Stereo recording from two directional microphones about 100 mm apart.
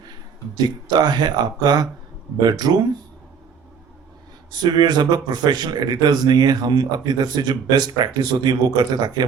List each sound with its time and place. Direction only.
0.5 s speech: 45° right (ahead or behind)
4.5 s speech: 45° right (ahead or behind)